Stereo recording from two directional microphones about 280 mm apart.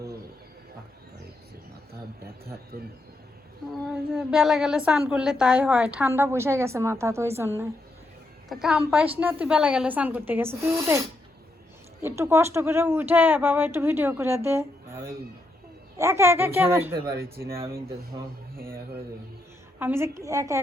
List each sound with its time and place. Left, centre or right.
2.2 s a man's voice: right
3.8 s a woman's voice: centre
12.0 s a woman's voice: centre
18.5 s speech: right
19.8 s a woman's voice: centre